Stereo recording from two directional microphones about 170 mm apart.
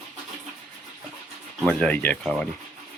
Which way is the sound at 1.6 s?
5° left (ahead or behind).